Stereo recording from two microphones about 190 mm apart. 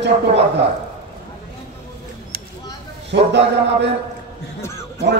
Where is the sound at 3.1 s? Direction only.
65° right (ahead or behind).